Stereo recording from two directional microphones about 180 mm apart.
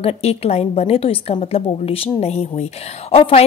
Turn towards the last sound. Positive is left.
turn(degrees=35)  # may be behind; listen again after turning